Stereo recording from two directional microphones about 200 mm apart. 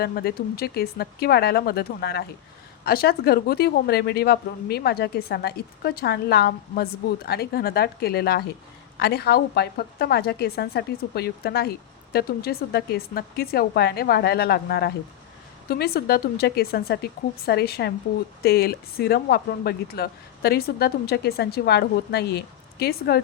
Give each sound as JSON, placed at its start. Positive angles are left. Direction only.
{"t": 0.0, "sound": "a woman's voice", "side_deg": 50}